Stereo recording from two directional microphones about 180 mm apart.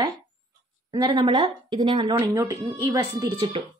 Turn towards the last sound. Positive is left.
turn(degrees=-20)  # may be behind; listen again after turning